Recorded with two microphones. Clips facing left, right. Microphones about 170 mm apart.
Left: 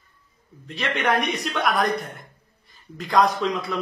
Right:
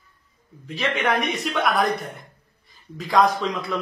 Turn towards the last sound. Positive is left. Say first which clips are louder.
# even
turn(degrees=0)  # may be behind; listen again after turning